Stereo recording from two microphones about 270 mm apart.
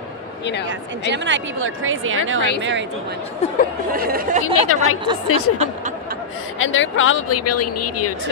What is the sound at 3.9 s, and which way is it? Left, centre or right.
Speech, right.